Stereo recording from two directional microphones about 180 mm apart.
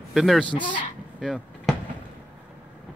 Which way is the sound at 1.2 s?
Centre (ahead or behind).